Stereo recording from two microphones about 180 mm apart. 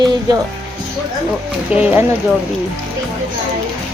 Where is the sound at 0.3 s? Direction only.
20° right (ahead or behind).